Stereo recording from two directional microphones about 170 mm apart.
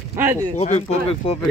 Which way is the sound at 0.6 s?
40° left (ahead or behind).